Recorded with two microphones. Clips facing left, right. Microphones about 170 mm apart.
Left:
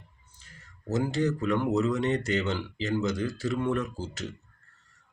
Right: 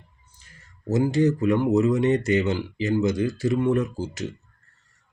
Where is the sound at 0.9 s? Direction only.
15° right (ahead or behind).